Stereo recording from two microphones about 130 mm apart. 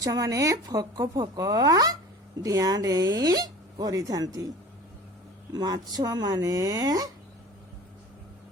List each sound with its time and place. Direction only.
0.0 s speech: 30° right (ahead or behind)
5.5 s speech: 30° right (ahead or behind)